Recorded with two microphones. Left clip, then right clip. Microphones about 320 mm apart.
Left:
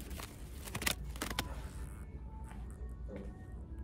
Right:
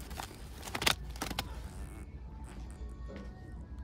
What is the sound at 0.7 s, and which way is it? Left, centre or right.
Vehicle, centre.